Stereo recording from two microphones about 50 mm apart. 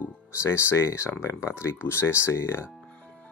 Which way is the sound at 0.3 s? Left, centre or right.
Left.